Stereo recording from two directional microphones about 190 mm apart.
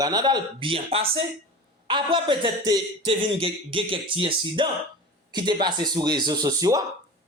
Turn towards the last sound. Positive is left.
turn(degrees=-20)  # may be behind; listen again after turning